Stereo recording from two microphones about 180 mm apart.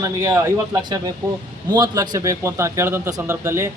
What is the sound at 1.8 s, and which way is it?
A man's voice, 20° right (ahead or behind).